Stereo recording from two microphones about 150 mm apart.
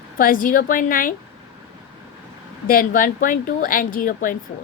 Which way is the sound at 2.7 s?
70° left (ahead or behind).